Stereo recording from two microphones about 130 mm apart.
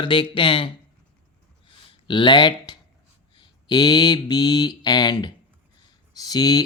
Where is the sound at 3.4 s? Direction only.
35° left (ahead or behind).